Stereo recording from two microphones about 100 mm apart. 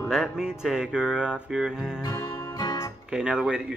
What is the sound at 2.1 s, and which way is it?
Music, 40° left (ahead or behind).